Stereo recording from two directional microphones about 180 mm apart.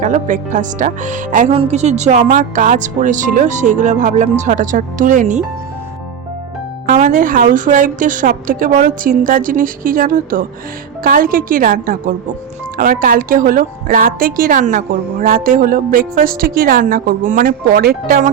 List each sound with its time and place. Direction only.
0.0 s a woman's voice: 45° right (ahead or behind)
6.8 s a woman's voice: 45° right (ahead or behind)